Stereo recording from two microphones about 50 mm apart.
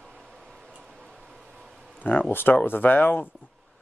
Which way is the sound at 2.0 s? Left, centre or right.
Left.